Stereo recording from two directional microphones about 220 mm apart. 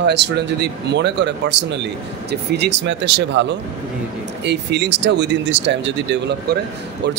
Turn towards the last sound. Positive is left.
turn(degrees=-50)  # may be behind; listen again after turning